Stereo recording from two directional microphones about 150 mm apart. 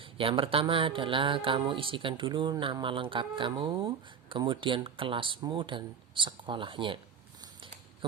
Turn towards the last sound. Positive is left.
turn(degrees=-35)  # may be behind; listen again after turning